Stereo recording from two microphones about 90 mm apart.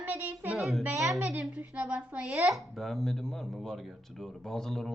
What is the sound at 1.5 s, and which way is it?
A man's voice, 15° right (ahead or behind).